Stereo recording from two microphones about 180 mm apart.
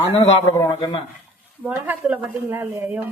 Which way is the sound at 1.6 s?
10° right (ahead or behind).